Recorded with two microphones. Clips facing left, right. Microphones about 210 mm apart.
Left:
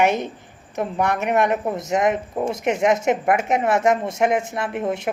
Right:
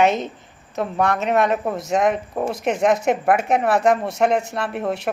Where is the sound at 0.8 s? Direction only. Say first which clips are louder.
Right 1 dB; 20° left (ahead or behind).